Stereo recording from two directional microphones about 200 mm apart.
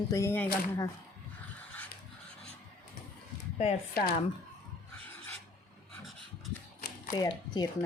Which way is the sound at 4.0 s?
50° left (ahead or behind).